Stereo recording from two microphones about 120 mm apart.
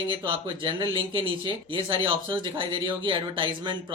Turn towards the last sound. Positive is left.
turn(degrees=-45)  # may be behind; listen again after turning